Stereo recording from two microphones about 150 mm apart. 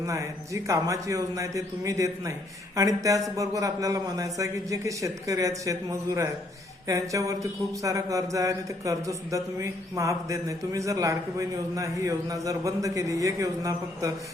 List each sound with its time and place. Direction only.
0.0 s speech: 20° right (ahead or behind)